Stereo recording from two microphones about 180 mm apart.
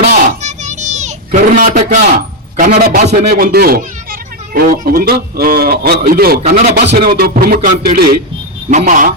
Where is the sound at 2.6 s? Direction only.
50° right (ahead or behind).